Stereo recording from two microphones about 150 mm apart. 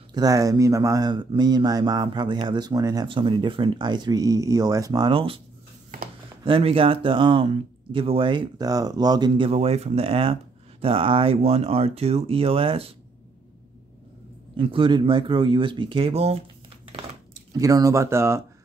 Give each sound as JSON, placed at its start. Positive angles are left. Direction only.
{"t": 0.1, "sound": "speech", "side_deg": -25}
{"t": 6.4, "sound": "speech", "side_deg": -40}
{"t": 9.3, "sound": "speech", "side_deg": -40}
{"t": 14.6, "sound": "speech", "side_deg": -35}
{"t": 17.5, "sound": "speech", "side_deg": -25}